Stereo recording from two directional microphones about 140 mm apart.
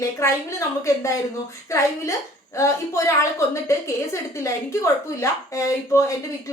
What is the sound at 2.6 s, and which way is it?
A woman's voice, 20° left (ahead or behind).